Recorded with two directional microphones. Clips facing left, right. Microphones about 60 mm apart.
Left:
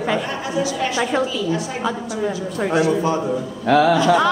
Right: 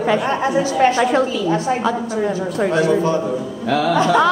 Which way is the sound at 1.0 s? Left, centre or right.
Centre.